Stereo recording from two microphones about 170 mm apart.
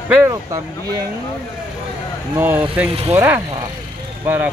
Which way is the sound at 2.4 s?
10° right (ahead or behind).